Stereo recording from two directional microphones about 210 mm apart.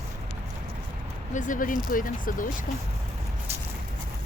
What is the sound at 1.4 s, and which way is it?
Speech, 40° left (ahead or behind).